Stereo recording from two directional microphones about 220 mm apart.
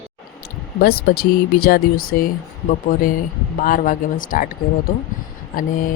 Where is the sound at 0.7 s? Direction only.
45° left (ahead or behind).